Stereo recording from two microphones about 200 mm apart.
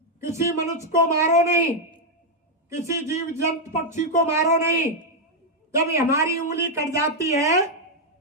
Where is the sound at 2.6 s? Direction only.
15° right (ahead or behind).